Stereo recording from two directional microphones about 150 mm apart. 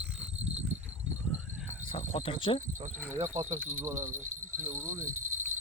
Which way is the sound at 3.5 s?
15° right (ahead or behind).